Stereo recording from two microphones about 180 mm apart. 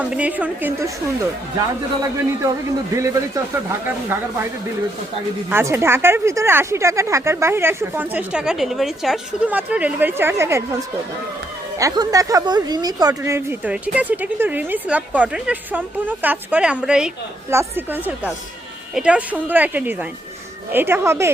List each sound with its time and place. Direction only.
0.0 s speech: 5° right (ahead or behind)
5.5 s speech: 10° right (ahead or behind)
11.8 s speech: 20° right (ahead or behind)